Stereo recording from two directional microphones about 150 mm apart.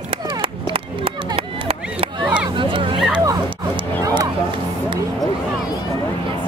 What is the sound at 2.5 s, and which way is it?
Hubbub, 35° right (ahead or behind).